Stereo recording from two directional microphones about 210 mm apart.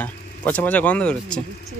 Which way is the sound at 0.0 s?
5° left (ahead or behind).